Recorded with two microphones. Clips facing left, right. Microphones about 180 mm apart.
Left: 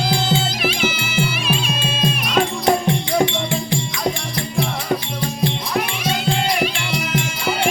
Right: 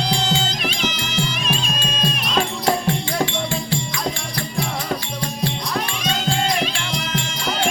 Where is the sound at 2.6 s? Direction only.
20° left (ahead or behind).